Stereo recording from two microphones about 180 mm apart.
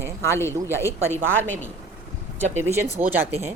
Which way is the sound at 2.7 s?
35° right (ahead or behind).